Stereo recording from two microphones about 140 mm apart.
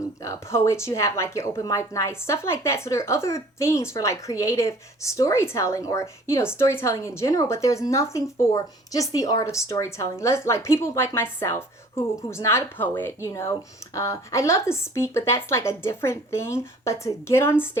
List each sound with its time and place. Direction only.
0.2 s speech: 20° left (ahead or behind)